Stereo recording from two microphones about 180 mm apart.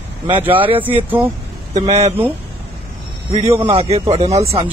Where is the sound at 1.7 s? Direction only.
40° right (ahead or behind).